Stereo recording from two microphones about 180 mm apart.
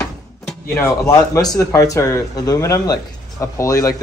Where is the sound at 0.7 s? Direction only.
15° left (ahead or behind).